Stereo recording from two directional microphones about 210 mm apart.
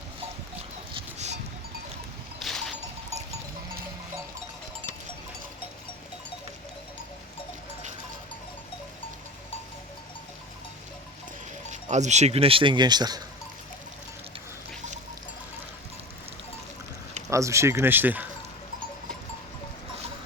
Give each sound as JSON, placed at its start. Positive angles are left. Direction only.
{"t": 2.4, "sound": "a sound", "side_deg": 0}
{"t": 11.7, "sound": "speech", "side_deg": -35}
{"t": 17.2, "sound": "speech", "side_deg": -15}